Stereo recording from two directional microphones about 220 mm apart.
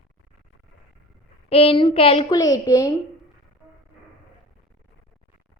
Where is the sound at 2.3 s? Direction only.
15° left (ahead or behind).